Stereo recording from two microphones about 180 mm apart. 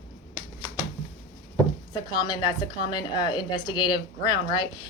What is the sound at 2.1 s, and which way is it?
A woman's voice, 25° left (ahead or behind).